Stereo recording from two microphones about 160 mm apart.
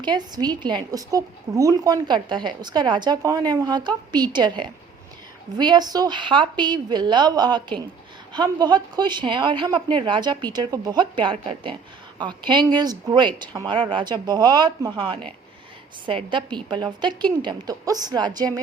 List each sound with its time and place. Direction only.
0.0 s a woman's voice: 25° right (ahead or behind)